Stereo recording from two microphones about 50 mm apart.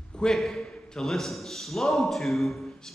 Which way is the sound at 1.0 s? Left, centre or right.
Centre.